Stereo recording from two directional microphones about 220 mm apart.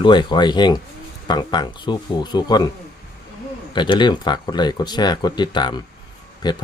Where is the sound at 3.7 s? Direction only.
20° left (ahead or behind).